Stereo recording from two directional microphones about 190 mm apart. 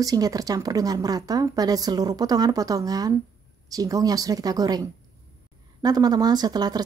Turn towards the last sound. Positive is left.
turn(degrees=-20)  # may be behind; listen again after turning